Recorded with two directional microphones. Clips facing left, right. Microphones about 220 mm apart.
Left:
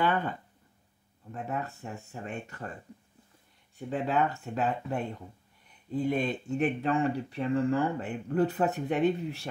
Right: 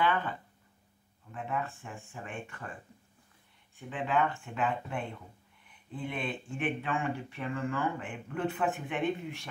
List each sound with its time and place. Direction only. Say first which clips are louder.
0.0 s a sound: left 2 dB; 45° left (ahead or behind)
1.3 s speech: left 1 dB; 40° left (ahead or behind)
3.7 s speech: left 2 dB; 40° left (ahead or behind)